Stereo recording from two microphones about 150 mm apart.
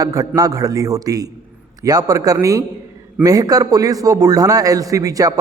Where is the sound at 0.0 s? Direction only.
25° right (ahead or behind).